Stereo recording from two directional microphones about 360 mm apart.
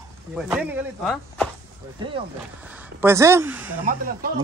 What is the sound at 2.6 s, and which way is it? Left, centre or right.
Speech, centre.